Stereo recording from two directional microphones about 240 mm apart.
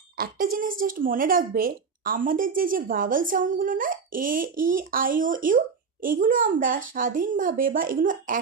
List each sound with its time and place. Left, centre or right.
0.2 s speech: right